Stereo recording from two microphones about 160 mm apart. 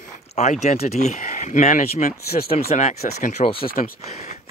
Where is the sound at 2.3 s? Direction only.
70° left (ahead or behind).